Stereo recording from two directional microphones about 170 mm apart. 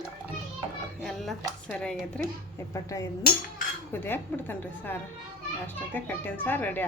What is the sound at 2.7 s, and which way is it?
Speech, 20° left (ahead or behind).